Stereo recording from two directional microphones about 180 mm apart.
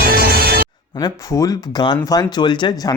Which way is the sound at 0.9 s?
20° left (ahead or behind).